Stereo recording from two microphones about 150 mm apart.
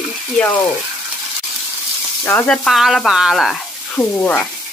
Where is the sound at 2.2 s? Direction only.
15° left (ahead or behind).